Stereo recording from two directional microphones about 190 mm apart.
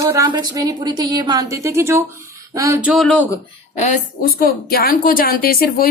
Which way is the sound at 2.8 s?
Centre (ahead or behind).